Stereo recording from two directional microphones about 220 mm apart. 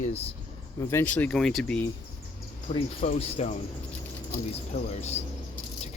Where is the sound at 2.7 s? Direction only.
30° left (ahead or behind).